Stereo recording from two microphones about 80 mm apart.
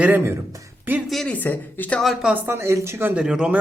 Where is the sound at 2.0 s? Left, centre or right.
Centre.